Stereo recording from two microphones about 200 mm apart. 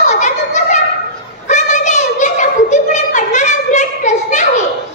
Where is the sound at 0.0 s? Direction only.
35° left (ahead or behind).